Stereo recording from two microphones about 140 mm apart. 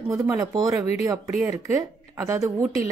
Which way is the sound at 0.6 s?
25° right (ahead or behind).